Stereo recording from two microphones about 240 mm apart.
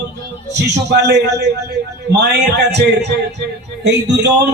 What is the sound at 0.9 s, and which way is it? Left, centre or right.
Speech, right.